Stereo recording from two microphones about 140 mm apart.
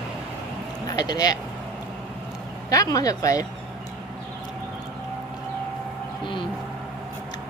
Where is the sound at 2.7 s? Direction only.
25° left (ahead or behind).